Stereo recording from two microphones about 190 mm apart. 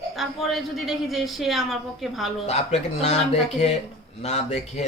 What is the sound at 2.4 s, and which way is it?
Speech, 35° left (ahead or behind).